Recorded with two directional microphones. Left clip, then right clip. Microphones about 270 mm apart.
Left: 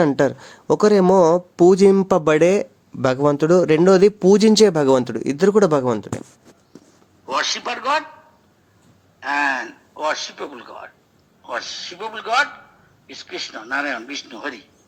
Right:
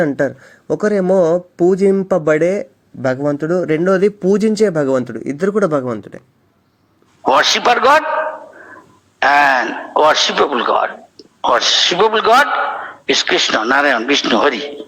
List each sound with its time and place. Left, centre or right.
0.0 s speech: centre
7.3 s speech: right